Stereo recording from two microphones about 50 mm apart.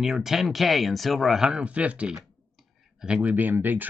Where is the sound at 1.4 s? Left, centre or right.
Right.